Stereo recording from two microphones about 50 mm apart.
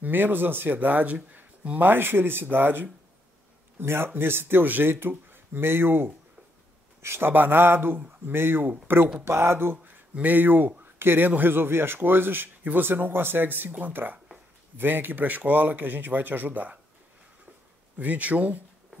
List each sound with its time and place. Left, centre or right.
0.0 s speech: right
1.3 s a sound: right
1.8 s a man's voice: right
9.2 s a man's voice: right
10.1 s a man's voice: right
17.9 s speech: right